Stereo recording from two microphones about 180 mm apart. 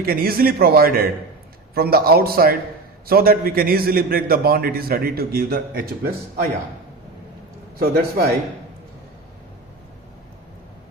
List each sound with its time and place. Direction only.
0.0 s a man's voice: 55° right (ahead or behind)
7.8 s a man's voice: 55° right (ahead or behind)